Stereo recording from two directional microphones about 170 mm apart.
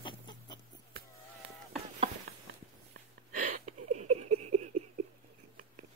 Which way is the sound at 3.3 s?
45° right (ahead or behind).